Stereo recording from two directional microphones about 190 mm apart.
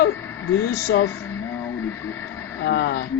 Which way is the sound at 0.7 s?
55° left (ahead or behind).